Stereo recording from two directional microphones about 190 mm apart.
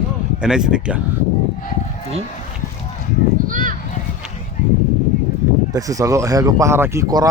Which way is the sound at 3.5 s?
45° right (ahead or behind).